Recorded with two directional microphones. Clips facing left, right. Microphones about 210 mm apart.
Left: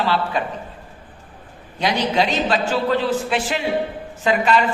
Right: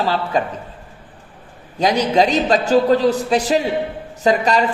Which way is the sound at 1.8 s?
40° right (ahead or behind).